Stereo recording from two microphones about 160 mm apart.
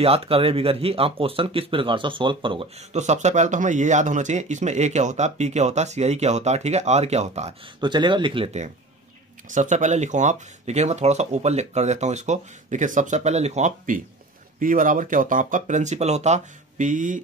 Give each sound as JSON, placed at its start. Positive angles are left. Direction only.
{"t": 0.0, "sound": "speech", "side_deg": -35}
{"t": 9.5, "sound": "speech", "side_deg": -50}